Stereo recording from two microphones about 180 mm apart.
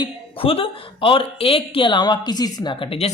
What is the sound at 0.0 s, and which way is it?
Speech, 30° left (ahead or behind).